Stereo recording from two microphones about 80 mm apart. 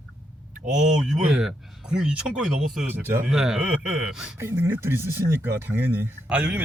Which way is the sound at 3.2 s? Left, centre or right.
Centre.